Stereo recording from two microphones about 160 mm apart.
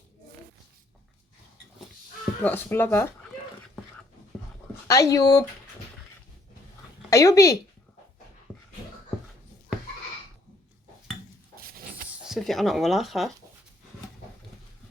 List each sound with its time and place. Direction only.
2.4 s speech: 10° left (ahead or behind)
4.9 s speech: 20° left (ahead or behind)
7.1 s speech: 20° left (ahead or behind)
11.7 s a sound: 65° right (ahead or behind)
12.2 s speech: centre (ahead or behind)